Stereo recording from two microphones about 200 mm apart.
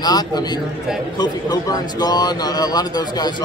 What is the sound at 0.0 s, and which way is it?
Speech, 20° left (ahead or behind).